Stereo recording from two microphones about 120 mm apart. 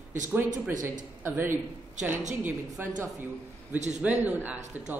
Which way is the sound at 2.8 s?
15° right (ahead or behind).